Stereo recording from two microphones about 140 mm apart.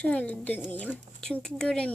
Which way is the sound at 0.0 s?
10° left (ahead or behind).